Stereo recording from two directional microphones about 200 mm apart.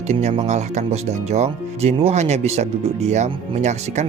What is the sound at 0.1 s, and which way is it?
Speech, 30° right (ahead or behind).